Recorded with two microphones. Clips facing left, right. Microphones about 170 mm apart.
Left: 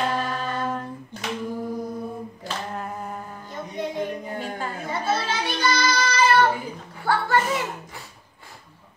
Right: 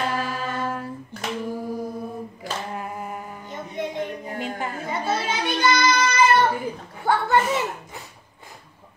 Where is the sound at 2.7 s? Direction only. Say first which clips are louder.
Even; 10° right (ahead or behind).